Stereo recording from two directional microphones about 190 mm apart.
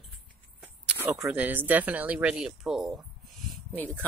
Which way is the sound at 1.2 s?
10° right (ahead or behind).